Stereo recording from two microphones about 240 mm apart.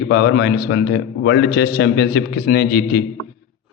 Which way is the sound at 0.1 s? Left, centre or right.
Left.